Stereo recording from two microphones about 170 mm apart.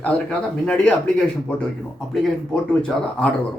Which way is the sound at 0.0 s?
5° left (ahead or behind).